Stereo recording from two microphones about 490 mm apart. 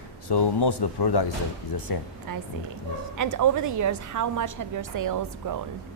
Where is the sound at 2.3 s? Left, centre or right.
Right.